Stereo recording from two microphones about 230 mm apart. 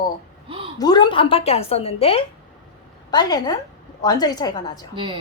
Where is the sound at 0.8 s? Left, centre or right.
Centre.